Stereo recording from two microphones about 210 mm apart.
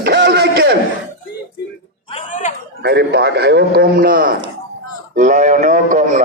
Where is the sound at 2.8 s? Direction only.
50° right (ahead or behind).